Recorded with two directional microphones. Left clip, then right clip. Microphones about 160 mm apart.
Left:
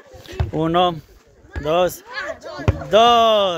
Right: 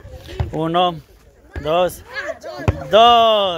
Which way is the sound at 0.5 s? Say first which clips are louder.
Even; 30° left (ahead or behind).